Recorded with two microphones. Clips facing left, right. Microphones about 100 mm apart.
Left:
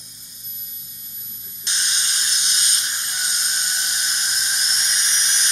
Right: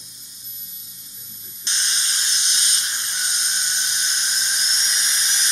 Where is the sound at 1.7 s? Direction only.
5° left (ahead or behind).